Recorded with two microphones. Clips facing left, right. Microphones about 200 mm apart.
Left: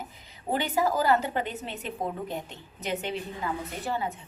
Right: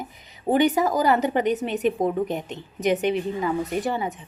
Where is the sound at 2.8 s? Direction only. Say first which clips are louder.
Right 10 dB; 15° right (ahead or behind).